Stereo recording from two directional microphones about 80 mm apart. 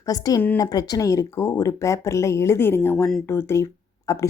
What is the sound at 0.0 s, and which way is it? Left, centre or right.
Speech, left.